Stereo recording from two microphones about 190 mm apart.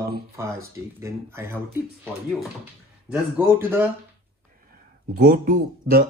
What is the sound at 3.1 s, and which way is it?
Speech, 10° right (ahead or behind).